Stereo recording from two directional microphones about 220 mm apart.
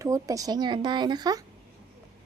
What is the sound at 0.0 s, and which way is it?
Speech, 15° right (ahead or behind).